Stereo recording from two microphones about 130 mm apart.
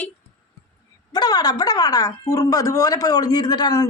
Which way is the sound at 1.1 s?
30° left (ahead or behind).